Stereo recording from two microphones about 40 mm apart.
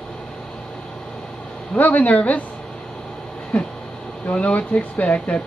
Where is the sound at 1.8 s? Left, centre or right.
Left.